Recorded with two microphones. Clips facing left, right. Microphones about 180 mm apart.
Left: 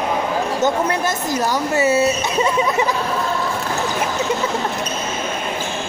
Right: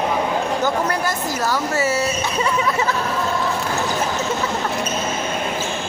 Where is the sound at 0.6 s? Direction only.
20° left (ahead or behind).